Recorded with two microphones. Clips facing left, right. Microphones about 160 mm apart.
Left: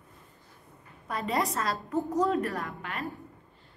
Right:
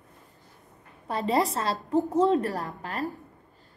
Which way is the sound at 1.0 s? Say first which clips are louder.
Right 4 dB; 30° right (ahead or behind).